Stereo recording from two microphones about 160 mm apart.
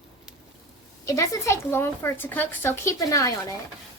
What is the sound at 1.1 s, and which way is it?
Speech, 20° left (ahead or behind).